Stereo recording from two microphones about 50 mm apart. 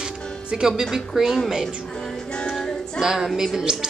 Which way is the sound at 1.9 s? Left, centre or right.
Centre.